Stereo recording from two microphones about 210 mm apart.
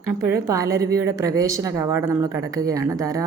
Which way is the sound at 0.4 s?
15° right (ahead or behind).